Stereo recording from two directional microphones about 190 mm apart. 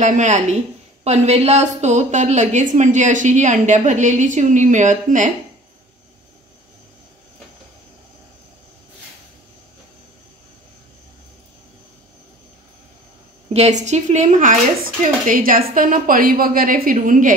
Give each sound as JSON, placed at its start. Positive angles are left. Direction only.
{"t": 0.0, "sound": "a woman's voice", "side_deg": -40}
{"t": 13.5, "sound": "a woman's voice", "side_deg": -35}